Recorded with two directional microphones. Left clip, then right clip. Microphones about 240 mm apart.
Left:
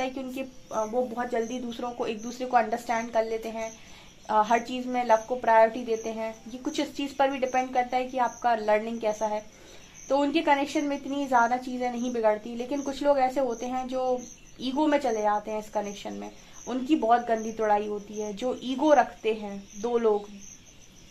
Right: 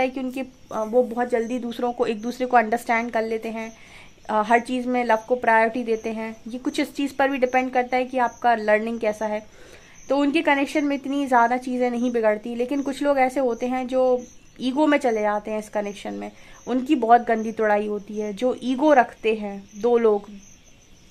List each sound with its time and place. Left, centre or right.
0.0 s speech: right